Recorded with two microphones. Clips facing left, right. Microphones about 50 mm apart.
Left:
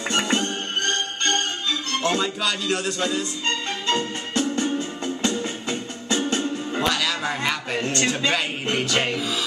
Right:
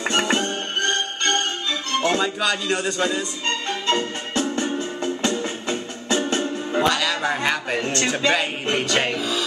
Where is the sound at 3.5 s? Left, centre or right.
Right.